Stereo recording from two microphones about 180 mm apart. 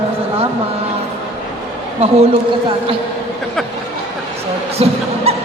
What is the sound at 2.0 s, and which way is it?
Speech, 35° right (ahead or behind).